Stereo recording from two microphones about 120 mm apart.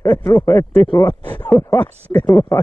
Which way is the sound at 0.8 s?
40° left (ahead or behind).